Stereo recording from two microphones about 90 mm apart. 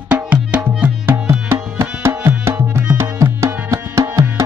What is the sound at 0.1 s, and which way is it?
Music, 15° right (ahead or behind).